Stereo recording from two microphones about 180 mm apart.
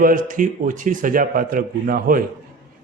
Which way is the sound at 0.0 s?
50° right (ahead or behind).